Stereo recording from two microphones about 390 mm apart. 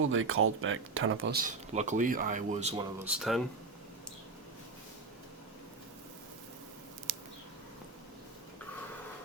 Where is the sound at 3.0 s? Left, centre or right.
Centre.